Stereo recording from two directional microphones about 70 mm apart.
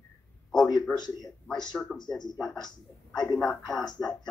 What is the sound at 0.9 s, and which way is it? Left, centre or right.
Speech, left.